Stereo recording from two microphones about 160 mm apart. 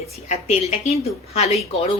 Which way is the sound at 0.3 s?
40° left (ahead or behind).